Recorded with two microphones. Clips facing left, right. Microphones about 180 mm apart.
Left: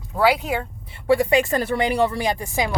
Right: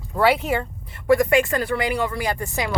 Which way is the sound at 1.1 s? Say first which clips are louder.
Right 1 dB; 35° left (ahead or behind).